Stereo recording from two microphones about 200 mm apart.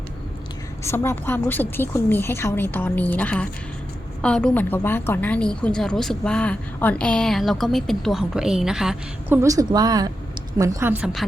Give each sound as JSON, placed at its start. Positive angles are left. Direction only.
{"t": 0.9, "sound": "a woman's voice", "side_deg": 10}
{"t": 9.4, "sound": "a woman's voice", "side_deg": -15}